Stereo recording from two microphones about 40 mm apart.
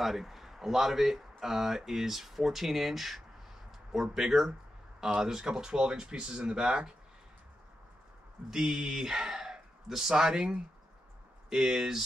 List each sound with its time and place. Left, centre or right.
0.0 s a man's voice: centre; by 6.9 s right
8.5 s speech: centre
11.5 s speech: centre